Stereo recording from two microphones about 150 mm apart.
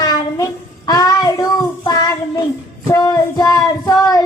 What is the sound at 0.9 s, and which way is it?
Child singing, 25° left (ahead or behind).